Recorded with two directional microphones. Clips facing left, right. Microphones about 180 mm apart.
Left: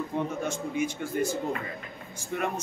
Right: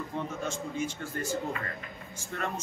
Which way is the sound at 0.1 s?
15° left (ahead or behind).